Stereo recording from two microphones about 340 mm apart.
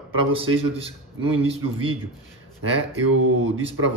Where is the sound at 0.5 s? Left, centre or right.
Centre.